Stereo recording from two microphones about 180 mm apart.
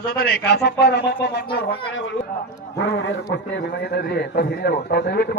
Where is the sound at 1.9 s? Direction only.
90° left; by 5.3 s 60° left (ahead or behind).